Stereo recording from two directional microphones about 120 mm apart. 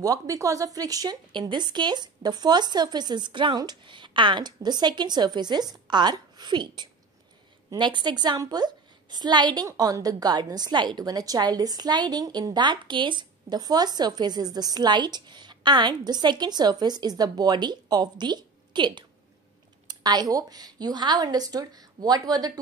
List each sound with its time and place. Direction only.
0.0 s a woman's voice: 30° right (ahead or behind)